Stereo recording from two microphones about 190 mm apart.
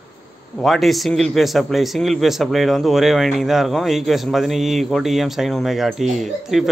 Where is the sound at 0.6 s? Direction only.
Centre (ahead or behind).